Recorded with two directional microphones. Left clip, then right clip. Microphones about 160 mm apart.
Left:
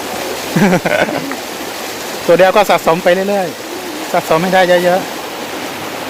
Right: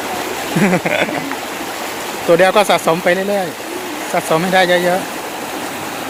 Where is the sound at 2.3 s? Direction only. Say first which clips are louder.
Left 2 dB; 10° left (ahead or behind).